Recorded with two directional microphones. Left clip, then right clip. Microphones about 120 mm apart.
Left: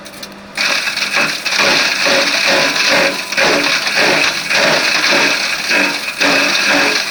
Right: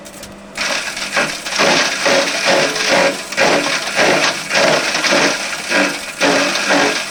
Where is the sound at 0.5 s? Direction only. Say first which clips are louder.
Left 4 dB; 25° left (ahead or behind).